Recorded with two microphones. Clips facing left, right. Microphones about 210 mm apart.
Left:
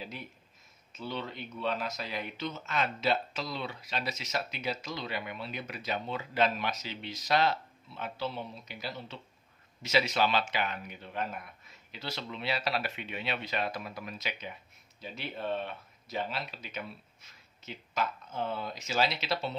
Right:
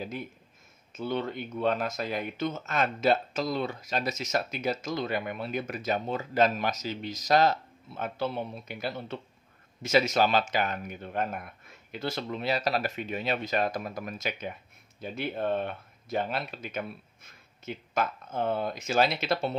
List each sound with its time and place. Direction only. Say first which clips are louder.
0.9 s speech: right 7 dB; 50° right (ahead or behind)